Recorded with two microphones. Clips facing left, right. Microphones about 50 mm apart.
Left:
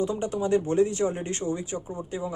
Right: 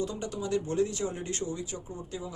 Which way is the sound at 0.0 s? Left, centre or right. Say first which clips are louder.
Left 7 dB; left.